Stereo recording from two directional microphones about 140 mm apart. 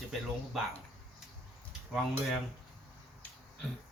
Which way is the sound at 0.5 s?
Centre (ahead or behind).